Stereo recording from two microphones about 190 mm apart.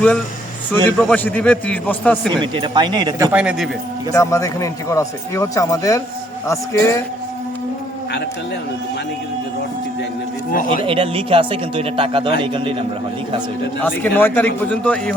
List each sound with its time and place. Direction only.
0.9 s speech: 10° left (ahead or behind)
2.3 s a man's voice: 25° right (ahead or behind)
3.3 s a man's voice: 5° right (ahead or behind)
4.1 s speech: 15° left (ahead or behind)
10.5 s a man's voice: 45° left (ahead or behind)
10.8 s a man's voice: 30° right (ahead or behind)
13.8 s speech: 10° left (ahead or behind)